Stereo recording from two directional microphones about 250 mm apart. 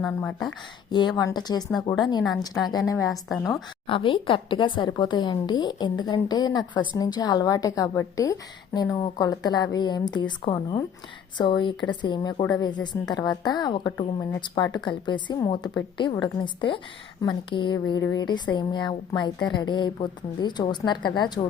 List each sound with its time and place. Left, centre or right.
0.0 s speech: centre
0.9 s a woman's voice: centre
3.1 s speech: centre
3.8 s a woman's voice: left